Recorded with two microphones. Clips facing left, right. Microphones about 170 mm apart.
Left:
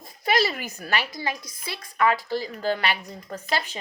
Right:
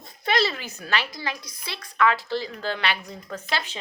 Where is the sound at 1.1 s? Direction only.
50° left (ahead or behind).